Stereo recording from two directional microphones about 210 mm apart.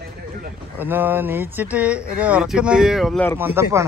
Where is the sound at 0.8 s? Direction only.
10° right (ahead or behind).